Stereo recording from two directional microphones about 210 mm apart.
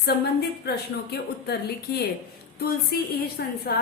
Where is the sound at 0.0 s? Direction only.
50° left (ahead or behind).